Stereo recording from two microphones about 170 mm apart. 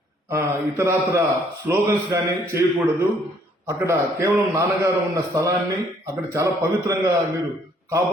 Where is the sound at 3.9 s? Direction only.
15° right (ahead or behind).